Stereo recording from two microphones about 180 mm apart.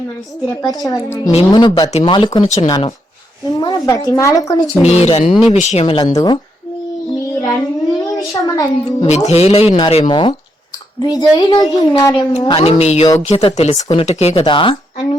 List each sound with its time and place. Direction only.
0.9 s speech: 20° left (ahead or behind)
1.3 s speech: 30° left (ahead or behind)
1.9 s speech: 35° left (ahead or behind)
2.1 s speech: 25° left (ahead or behind)
4.8 s speech: 35° left (ahead or behind)
7.1 s child singing: 20° left (ahead or behind)
9.0 s speech: 35° left (ahead or behind)